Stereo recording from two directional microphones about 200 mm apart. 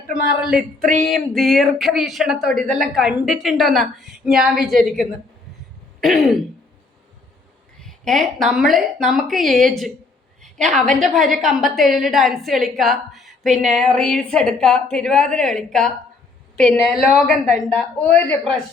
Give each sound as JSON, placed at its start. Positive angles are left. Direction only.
{"t": 0.4, "sound": "a woman's voice", "side_deg": 0}
{"t": 6.0, "sound": "throat clearing", "side_deg": 0}
{"t": 7.8, "sound": "a woman's voice", "side_deg": 0}